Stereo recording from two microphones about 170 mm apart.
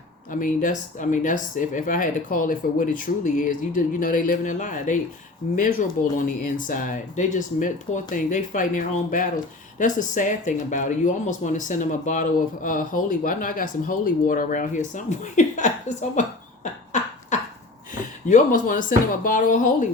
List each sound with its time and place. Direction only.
0.3 s speech: 50° left (ahead or behind)
6.1 s speech: 50° left (ahead or behind)
16.9 s a sound: 45° left (ahead or behind)
17.9 s speech: 50° left (ahead or behind)